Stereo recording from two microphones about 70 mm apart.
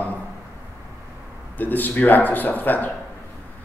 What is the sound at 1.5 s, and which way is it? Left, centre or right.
A man's voice, left.